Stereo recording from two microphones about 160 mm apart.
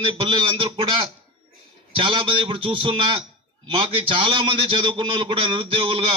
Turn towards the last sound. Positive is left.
turn(degrees=-35)  # may be behind; listen again after turning